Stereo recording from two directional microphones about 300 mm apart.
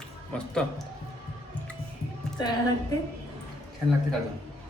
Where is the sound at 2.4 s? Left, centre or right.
Centre.